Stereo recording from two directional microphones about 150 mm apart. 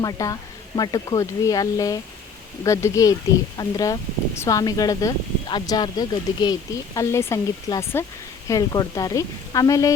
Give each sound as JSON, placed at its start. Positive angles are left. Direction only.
{"t": 0.0, "sound": "speech", "side_deg": 25}